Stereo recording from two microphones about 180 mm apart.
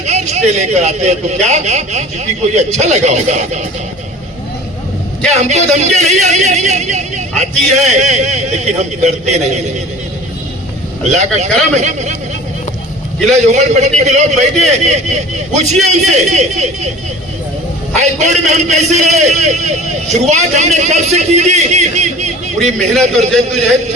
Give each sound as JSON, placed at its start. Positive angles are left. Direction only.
{"t": 0.0, "sound": "a man's voice", "side_deg": -40}
{"t": 5.3, "sound": "a man's voice", "side_deg": -40}
{"t": 11.1, "sound": "a man's voice", "side_deg": -40}
{"t": 13.3, "sound": "a man's voice", "side_deg": -40}
{"t": 18.0, "sound": "a man's voice", "side_deg": -40}